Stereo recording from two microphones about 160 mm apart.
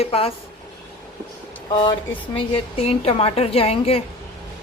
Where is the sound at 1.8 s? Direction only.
35° left (ahead or behind).